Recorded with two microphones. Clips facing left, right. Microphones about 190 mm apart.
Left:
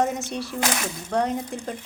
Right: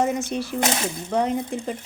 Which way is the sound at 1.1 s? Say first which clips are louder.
Right 1 dB; centre (ahead or behind).